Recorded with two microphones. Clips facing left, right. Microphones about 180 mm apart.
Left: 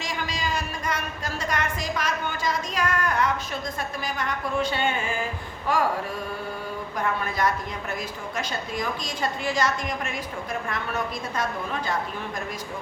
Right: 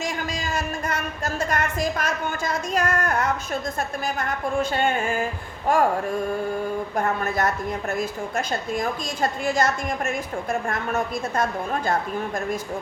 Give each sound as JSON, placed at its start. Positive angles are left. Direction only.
{"t": 0.0, "sound": "a sound", "side_deg": -50}
{"t": 1.2, "sound": "a woman's voice", "side_deg": -50}
{"t": 6.9, "sound": "a woman's voice", "side_deg": -45}